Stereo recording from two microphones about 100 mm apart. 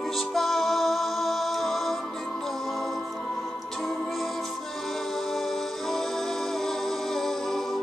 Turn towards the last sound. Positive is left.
turn(degrees=0)  # may be behind; listen again after turning